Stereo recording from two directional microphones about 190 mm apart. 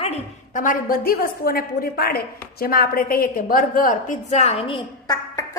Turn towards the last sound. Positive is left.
turn(degrees=30)  # may be behind; listen again after turning